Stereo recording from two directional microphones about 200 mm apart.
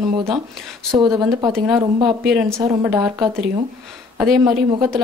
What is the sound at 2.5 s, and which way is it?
Speech, 15° right (ahead or behind).